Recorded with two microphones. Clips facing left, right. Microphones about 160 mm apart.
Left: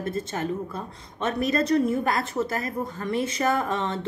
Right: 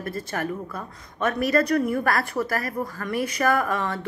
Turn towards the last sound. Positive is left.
turn(degrees=25)  # may be behind; listen again after turning